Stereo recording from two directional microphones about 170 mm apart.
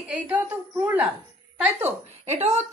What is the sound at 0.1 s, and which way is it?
Speech, 10° right (ahead or behind).